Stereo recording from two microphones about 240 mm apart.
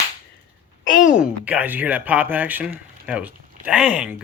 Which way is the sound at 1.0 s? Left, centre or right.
Centre.